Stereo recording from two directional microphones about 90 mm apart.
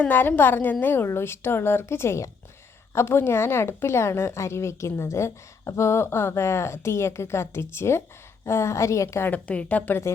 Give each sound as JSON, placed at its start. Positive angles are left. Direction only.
{"t": 0.0, "sound": "a woman's voice", "side_deg": 25}
{"t": 9.3, "sound": "a woman's voice", "side_deg": 15}